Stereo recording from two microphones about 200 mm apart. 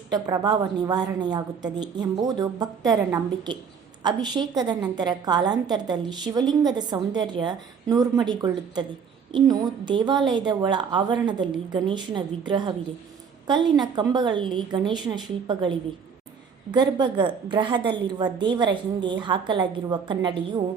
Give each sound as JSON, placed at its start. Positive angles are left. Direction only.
{"t": 0.1, "sound": "a woman's voice", "side_deg": -20}